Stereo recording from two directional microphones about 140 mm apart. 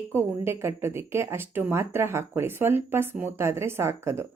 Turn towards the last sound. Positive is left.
turn(degrees=-20)  # may be behind; listen again after turning